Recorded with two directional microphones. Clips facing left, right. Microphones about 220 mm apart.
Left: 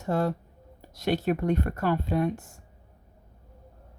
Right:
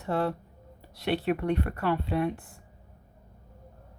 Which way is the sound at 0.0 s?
45° left (ahead or behind).